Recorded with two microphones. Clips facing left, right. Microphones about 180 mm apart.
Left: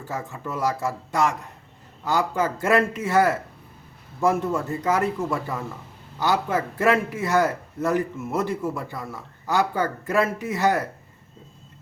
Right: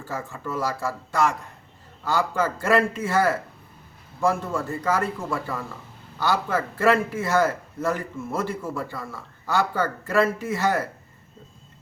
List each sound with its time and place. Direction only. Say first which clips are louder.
0.0 s a man's voice: left 1 dB; 20° left (ahead or behind)